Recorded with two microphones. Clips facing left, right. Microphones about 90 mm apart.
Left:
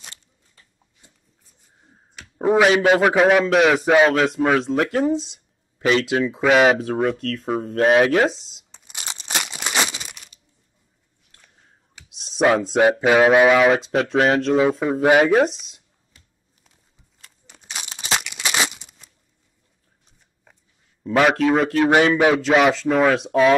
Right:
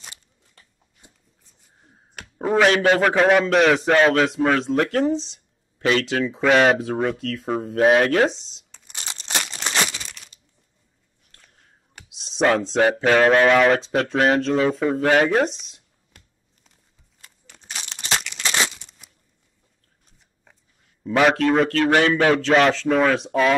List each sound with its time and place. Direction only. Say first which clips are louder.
1.0 s a sound: right 3 dB; 15° right (ahead or behind)
2.3 s a man's voice: left 2 dB; 10° left (ahead or behind)
6.2 s a man's voice: left 1 dB; 5° left (ahead or behind)
8.7 s a sound: left 1 dB; 10° left (ahead or behind)
12.1 s a man's voice: left 2 dB; centre (ahead or behind)
15.2 s a man's voice: left 3 dB; centre (ahead or behind)
16.1 s a sound: right 3 dB; 60° right (ahead or behind)
17.5 s crumpling: left 1 dB; 10° left (ahead or behind)
21.0 s a man's voice: left 1 dB; centre (ahead or behind)
21.7 s a man's voice: left 2 dB; 15° left (ahead or behind)